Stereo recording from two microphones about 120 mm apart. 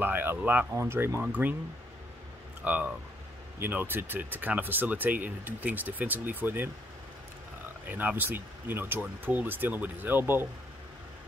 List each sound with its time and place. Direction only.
0.0 s speech: 15° right (ahead or behind)
2.6 s speech: 15° right (ahead or behind)
7.9 s speech: 15° right (ahead or behind)